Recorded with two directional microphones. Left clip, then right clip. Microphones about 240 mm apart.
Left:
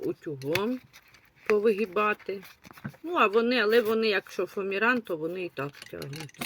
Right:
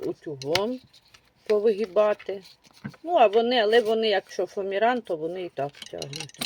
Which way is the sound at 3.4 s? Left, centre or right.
Left.